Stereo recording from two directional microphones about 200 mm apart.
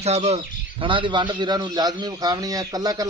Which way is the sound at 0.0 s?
30° right (ahead or behind).